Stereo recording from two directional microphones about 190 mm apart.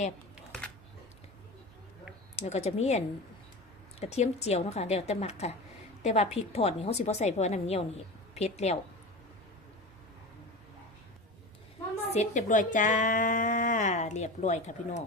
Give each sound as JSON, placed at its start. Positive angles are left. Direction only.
{"t": 2.3, "sound": "a woman's voice", "side_deg": 35}
{"t": 4.0, "sound": "a woman's voice", "side_deg": 35}
{"t": 12.1, "sound": "speech", "side_deg": 35}